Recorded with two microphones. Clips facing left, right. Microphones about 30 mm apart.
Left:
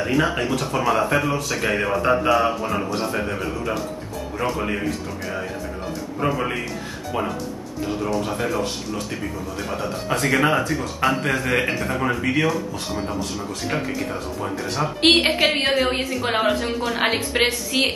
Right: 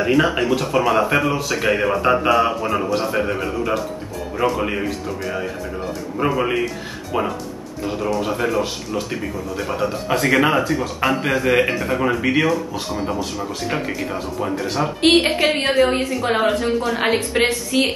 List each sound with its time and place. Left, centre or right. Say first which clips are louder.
0.0 s speech: right 4 dB; centre
6.1 s speech: right 4 dB; centre
7.8 s speech: right 2 dB; centre
15.0 s a woman's voice: right 1 dB; centre